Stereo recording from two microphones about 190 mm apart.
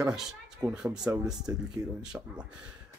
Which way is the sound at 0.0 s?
10° right (ahead or behind).